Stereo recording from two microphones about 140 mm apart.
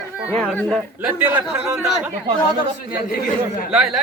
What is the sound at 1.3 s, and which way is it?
Speech, 5° right (ahead or behind).